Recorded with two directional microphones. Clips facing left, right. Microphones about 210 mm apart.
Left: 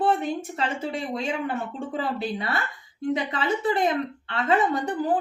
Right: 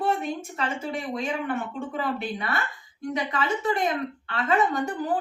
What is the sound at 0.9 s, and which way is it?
A woman's voice, 30° left (ahead or behind).